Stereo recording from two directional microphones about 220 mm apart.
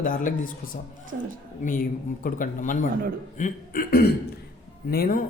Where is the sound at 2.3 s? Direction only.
40° left (ahead or behind).